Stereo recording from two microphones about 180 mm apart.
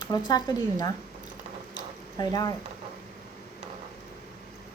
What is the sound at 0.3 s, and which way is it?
Speech, 20° left (ahead or behind).